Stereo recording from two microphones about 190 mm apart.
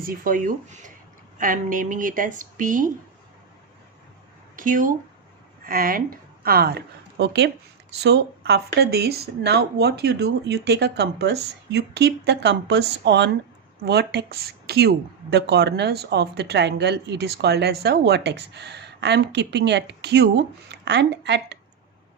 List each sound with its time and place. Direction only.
0.0 s a woman's voice: 50° right (ahead or behind)
4.5 s a woman's voice: 45° right (ahead or behind); by 21.6 s 65° right (ahead or behind)